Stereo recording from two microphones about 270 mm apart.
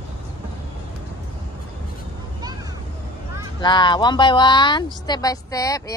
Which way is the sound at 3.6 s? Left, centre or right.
Centre.